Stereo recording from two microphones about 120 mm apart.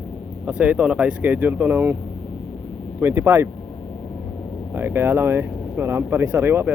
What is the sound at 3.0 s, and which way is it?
Speech, 20° right (ahead or behind).